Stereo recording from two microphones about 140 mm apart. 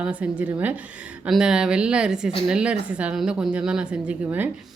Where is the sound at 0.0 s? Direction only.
10° right (ahead or behind).